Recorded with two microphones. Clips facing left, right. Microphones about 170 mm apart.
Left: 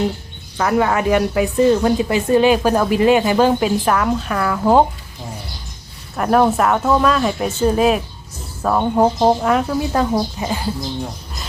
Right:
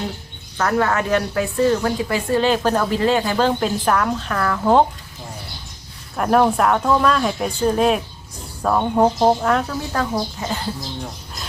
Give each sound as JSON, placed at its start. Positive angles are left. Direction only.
{"t": 0.5, "sound": "speech", "side_deg": 10}
{"t": 6.1, "sound": "speech", "side_deg": 0}